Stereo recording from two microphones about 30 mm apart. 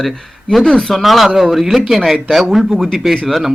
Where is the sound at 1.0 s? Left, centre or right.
Centre.